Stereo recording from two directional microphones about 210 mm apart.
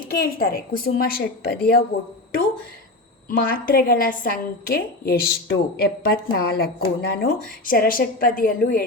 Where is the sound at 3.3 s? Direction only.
45° left (ahead or behind).